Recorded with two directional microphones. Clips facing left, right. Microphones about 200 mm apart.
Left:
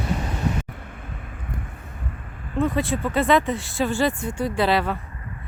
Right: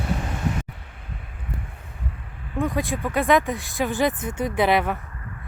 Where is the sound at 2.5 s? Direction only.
15° right (ahead or behind).